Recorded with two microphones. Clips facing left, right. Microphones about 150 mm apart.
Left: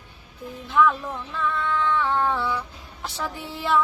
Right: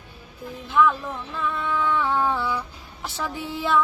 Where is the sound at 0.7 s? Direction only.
Centre (ahead or behind).